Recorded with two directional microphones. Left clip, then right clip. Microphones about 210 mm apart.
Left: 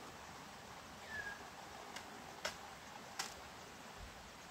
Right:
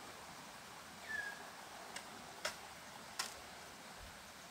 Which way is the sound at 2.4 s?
Centre (ahead or behind).